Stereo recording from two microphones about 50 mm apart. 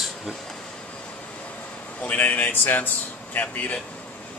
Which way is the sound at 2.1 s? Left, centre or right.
Left.